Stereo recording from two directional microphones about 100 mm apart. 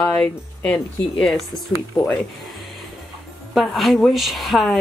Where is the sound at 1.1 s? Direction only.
5° left (ahead or behind).